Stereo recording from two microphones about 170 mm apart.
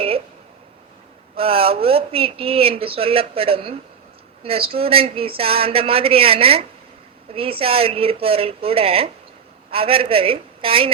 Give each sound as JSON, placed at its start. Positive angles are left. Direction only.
{"t": 1.4, "sound": "speech", "side_deg": -35}